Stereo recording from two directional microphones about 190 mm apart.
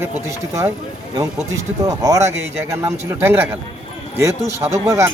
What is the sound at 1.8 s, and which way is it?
A man's voice, 15° right (ahead or behind).